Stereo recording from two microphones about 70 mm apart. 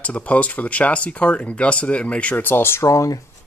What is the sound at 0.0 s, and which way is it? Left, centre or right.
Speech, centre.